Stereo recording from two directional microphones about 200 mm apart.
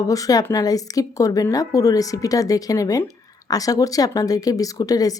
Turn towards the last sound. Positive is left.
turn(degrees=20)  # may be behind; listen again after turning